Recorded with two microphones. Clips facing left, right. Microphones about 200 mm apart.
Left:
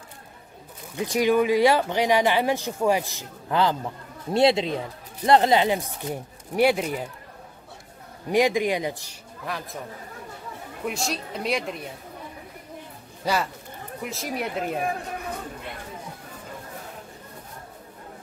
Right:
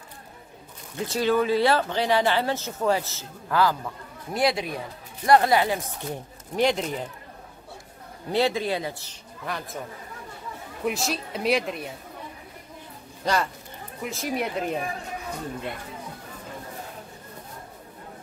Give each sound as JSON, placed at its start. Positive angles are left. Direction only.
{"t": 0.9, "sound": "speech", "side_deg": 15}
{"t": 8.3, "sound": "speech", "side_deg": 15}
{"t": 9.5, "sound": "speech", "side_deg": 0}
{"t": 10.9, "sound": "speech", "side_deg": 0}
{"t": 13.2, "sound": "speech", "side_deg": 5}